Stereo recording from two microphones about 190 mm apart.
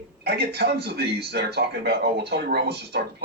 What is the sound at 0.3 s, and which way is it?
Speech, 60° right (ahead or behind).